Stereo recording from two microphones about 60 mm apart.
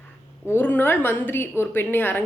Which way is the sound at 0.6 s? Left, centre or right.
Left.